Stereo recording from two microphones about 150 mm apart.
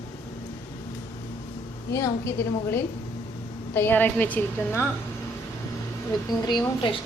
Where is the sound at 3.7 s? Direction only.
15° left (ahead or behind).